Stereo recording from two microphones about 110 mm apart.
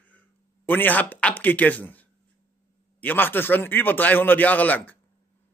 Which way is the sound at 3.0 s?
15° left (ahead or behind).